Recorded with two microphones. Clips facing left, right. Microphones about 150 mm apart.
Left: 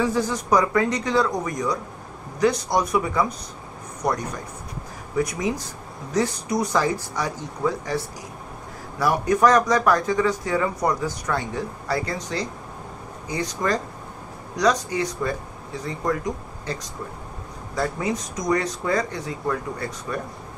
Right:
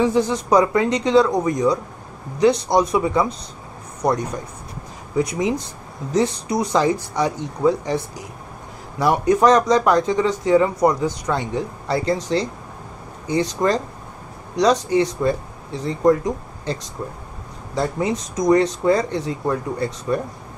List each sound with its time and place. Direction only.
0.0 s speech: 25° right (ahead or behind)
5.1 s speech: 25° right (ahead or behind)
9.0 s speech: 25° right (ahead or behind)
17.7 s speech: 25° right (ahead or behind)